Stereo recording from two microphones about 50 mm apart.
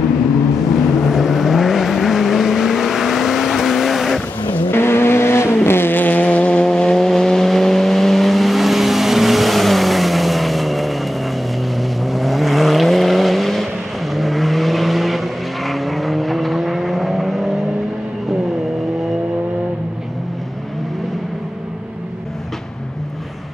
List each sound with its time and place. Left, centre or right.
1.0 s vehicle: centre
4.5 s vehicle: left
6.6 s vehicle: centre